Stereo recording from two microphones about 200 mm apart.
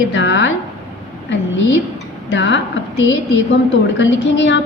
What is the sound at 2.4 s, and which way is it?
A woman's voice, 65° left (ahead or behind).